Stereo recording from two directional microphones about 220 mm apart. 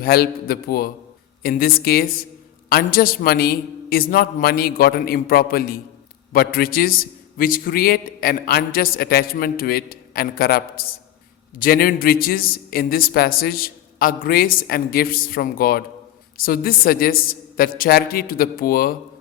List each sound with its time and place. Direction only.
0.0 s a man's voice: 45° left (ahead or behind)